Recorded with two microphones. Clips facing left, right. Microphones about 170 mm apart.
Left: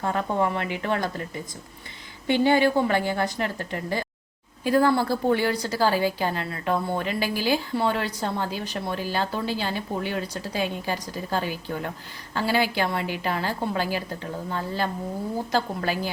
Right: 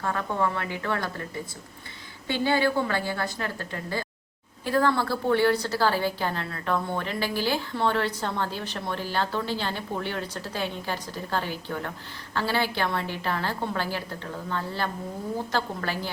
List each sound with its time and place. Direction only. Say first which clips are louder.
0.0 s speech: left 3 dB; 20° left (ahead or behind)
2.2 s a woman's voice: left 4 dB; 20° left (ahead or behind)